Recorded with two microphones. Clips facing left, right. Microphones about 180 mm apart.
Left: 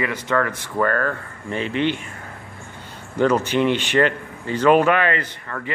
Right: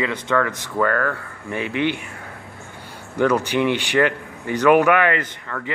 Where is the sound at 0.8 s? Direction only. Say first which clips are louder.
Even; 20° left (ahead or behind).